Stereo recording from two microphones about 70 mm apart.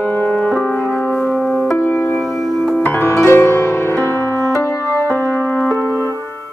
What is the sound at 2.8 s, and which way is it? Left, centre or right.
Music, left.